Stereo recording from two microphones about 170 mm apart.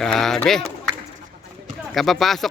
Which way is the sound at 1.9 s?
Centre (ahead or behind).